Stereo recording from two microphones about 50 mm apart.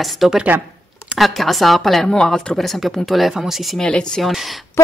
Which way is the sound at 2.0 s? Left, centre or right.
Centre.